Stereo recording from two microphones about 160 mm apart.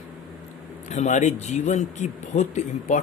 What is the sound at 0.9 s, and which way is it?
A man's voice, 50° left (ahead or behind).